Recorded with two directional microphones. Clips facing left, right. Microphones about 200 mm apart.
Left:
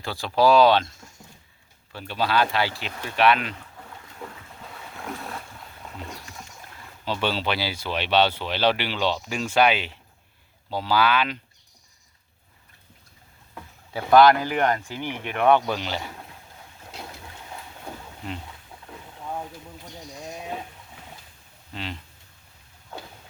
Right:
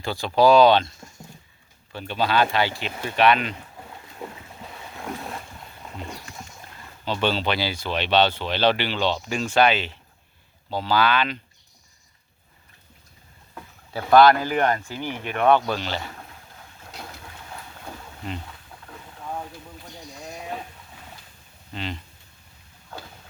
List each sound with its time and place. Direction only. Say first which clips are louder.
0.0 s speech: right 2 dB; centre (ahead or behind)
1.9 s speech: right 1 dB; 5° left (ahead or behind)
3.5 s boat: right 2 dB; 20° right (ahead or behind)
4.6 s boat: right 1 dB; 5° right (ahead or behind); by 9.9 s 10° left (ahead or behind)
10.7 s speech: right 1 dB; 10° left (ahead or behind)
13.9 s speech: right 1 dB; 15° left (ahead or behind)
21.7 s speech: right 2 dB; 5° left (ahead or behind)